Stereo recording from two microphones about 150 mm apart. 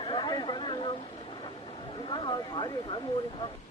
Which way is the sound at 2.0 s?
30° left (ahead or behind).